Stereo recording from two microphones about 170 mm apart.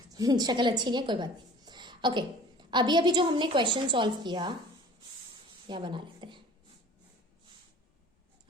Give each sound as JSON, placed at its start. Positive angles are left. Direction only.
{"t": 0.1, "sound": "a woman's voice", "side_deg": -25}
{"t": 5.6, "sound": "a woman's voice", "side_deg": -30}